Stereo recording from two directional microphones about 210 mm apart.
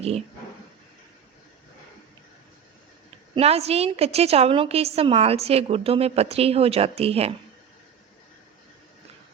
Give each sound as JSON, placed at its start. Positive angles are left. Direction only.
{"t": 3.3, "sound": "a woman's voice", "side_deg": -30}